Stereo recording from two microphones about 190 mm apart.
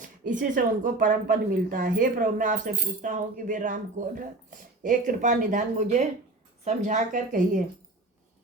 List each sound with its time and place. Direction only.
0.0 s speech: 45° right (ahead or behind)